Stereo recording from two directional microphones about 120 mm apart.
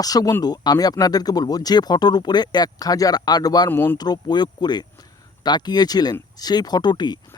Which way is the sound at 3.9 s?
35° left (ahead or behind).